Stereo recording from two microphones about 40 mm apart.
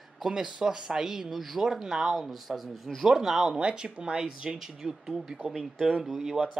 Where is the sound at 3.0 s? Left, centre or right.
Centre.